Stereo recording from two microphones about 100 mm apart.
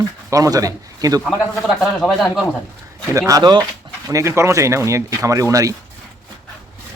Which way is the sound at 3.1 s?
35° right (ahead or behind).